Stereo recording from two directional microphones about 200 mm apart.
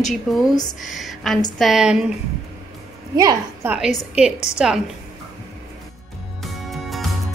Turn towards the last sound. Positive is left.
turn(degrees=0)  # may be behind; listen again after turning